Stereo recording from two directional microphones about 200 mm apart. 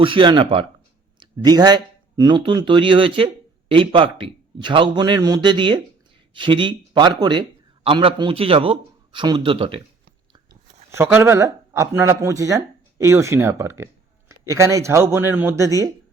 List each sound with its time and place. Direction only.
0.0 s a man's voice: 25° right (ahead or behind)